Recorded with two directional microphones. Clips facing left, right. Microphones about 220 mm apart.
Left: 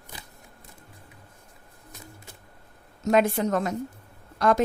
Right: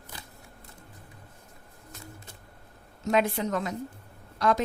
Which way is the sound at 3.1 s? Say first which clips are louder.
Left 4 dB; 50° left (ahead or behind).